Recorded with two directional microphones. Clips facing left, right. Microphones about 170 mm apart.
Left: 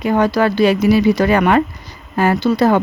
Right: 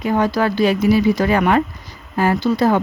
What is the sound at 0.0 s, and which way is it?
A woman's voice, 70° left (ahead or behind).